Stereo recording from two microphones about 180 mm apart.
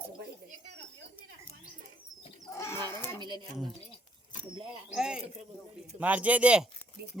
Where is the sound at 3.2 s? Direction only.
25° right (ahead or behind).